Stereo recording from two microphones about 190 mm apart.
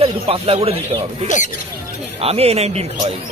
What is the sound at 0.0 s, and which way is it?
Speech, 30° right (ahead or behind).